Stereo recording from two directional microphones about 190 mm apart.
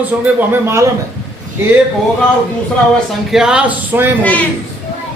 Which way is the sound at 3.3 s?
5° right (ahead or behind).